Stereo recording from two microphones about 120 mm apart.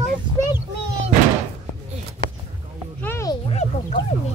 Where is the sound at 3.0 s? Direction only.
20° left (ahead or behind).